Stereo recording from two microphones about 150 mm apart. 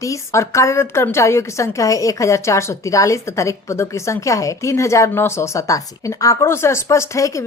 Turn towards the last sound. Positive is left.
turn(degrees=20)  # may be behind; listen again after turning